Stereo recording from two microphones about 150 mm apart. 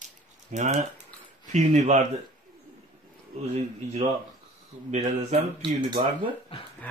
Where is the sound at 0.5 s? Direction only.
50° right (ahead or behind).